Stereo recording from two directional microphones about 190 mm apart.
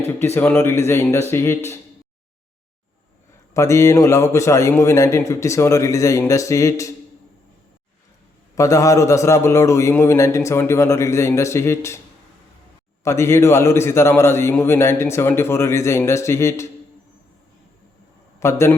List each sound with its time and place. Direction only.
0.2 s a man's voice: 10° left (ahead or behind)
3.5 s a man's voice: 15° left (ahead or behind)
8.5 s a man's voice: 15° left (ahead or behind)
13.1 s a man's voice: 15° left (ahead or behind)
18.3 s a man's voice: 15° left (ahead or behind)